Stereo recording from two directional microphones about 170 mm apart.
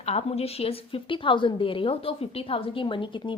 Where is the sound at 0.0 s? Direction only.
40° left (ahead or behind).